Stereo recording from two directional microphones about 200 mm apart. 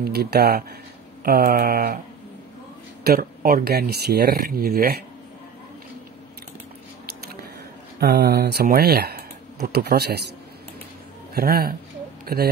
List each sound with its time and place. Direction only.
0.0 s speech: 50° right (ahead or behind)
3.0 s speech: 50° right (ahead or behind)
8.0 s speech: 50° right (ahead or behind)
11.3 s speech: 50° right (ahead or behind)